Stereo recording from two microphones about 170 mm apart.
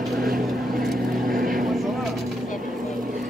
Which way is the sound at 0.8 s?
Centre (ahead or behind).